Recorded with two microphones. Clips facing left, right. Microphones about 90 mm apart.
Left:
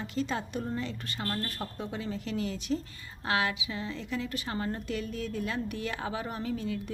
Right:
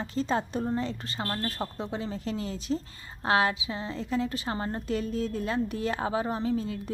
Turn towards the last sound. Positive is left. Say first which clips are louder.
# right 4 dB
turn(degrees=-35)  # may be behind; listen again after turning